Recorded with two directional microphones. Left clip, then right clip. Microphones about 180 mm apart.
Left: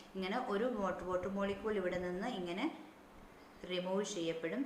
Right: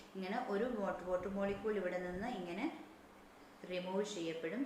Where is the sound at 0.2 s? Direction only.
40° left (ahead or behind).